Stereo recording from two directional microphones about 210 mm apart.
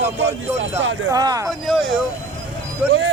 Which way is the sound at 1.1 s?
15° right (ahead or behind).